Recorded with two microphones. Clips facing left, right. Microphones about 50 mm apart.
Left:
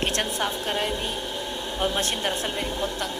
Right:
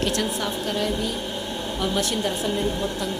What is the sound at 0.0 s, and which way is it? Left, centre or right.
A woman's voice, left.